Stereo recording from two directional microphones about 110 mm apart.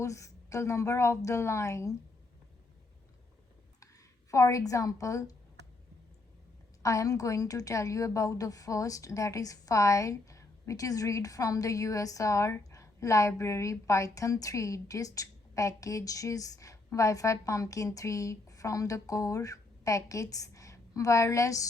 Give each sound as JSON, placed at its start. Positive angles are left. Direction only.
{"t": 0.0, "sound": "a woman's voice", "side_deg": 30}
{"t": 4.3, "sound": "a woman's voice", "side_deg": 30}
{"t": 6.8, "sound": "a woman's voice", "side_deg": 30}